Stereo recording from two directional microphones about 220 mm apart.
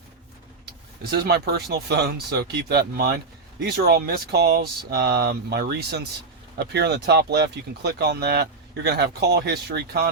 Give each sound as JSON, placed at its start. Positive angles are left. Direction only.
{"t": 1.1, "sound": "speech", "side_deg": -45}